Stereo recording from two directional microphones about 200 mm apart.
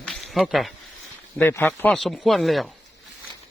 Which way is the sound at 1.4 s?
10° left (ahead or behind).